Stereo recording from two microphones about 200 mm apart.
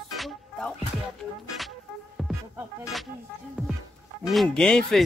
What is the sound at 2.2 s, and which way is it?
Music, centre (ahead or behind).